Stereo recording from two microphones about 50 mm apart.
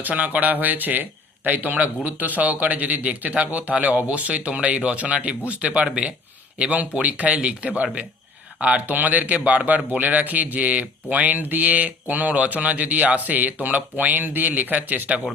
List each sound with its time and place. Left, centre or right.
0.0 s speech: right